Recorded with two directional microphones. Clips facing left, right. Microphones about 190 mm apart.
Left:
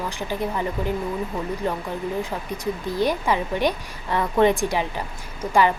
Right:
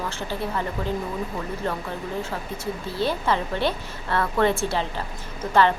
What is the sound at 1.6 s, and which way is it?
Speech, 15° left (ahead or behind).